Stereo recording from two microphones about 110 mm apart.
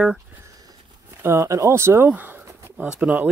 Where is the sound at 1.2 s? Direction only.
25° right (ahead or behind).